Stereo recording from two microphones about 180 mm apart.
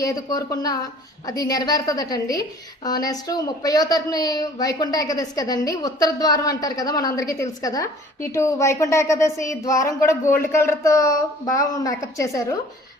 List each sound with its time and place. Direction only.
0.0 s speech: 20° left (ahead or behind)